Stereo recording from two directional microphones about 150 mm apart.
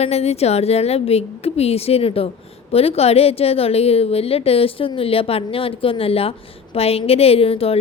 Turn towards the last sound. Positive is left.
turn(degrees=40)  # may be behind; listen again after turning